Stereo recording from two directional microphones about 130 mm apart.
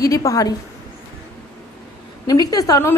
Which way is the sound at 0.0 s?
25° left (ahead or behind).